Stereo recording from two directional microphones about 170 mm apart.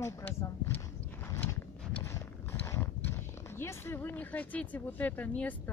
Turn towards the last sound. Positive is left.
turn(degrees=10)  # may be behind; listen again after turning